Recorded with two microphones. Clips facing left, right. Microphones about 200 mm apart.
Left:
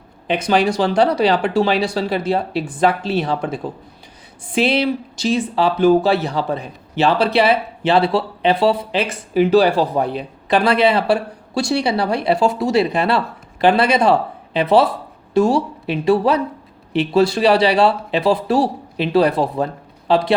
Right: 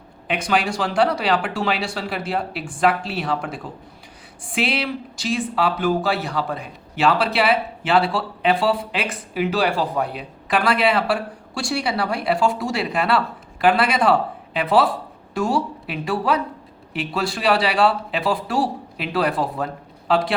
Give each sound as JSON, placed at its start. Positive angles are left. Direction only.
{"t": 0.3, "sound": "speech", "side_deg": 25}
{"t": 4.7, "sound": "speech", "side_deg": 25}